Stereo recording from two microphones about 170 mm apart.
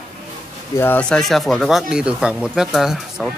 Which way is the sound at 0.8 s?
10° left (ahead or behind).